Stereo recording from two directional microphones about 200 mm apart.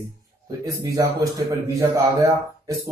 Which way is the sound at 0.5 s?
20° right (ahead or behind).